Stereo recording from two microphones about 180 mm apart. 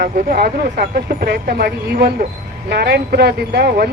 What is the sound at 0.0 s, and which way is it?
Speech, 55° right (ahead or behind).